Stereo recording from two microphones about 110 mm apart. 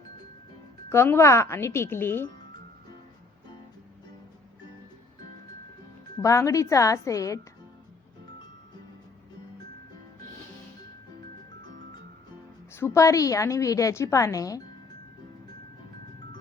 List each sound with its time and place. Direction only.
0.9 s a woman's voice: 25° left (ahead or behind)
6.1 s a woman's voice: 30° left (ahead or behind)
12.7 s a woman's voice: 25° left (ahead or behind)